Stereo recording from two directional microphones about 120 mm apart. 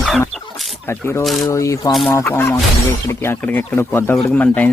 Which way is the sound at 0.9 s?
20° left (ahead or behind).